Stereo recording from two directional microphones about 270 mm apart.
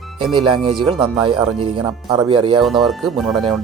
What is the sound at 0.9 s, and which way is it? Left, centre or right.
Speech, centre.